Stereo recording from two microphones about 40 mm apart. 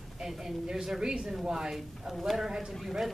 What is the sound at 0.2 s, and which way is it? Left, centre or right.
A woman's voice, centre.